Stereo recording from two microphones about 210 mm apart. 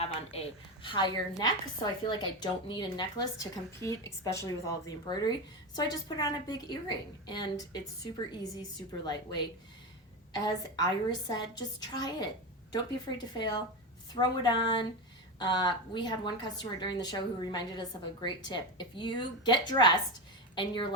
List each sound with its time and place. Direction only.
0.0 s a woman's voice: 30° left (ahead or behind)